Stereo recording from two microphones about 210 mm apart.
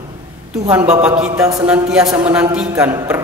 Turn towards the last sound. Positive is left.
turn(degrees=-10)  # may be behind; listen again after turning